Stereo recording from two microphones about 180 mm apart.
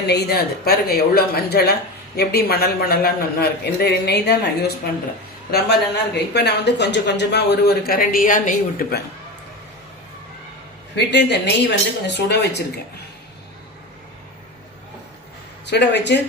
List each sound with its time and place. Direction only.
0.1 s speech: 60° left (ahead or behind)
10.9 s speech: 75° left (ahead or behind)
15.6 s speech: 70° left (ahead or behind)